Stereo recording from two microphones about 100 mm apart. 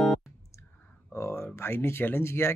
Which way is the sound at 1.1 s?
25° left (ahead or behind).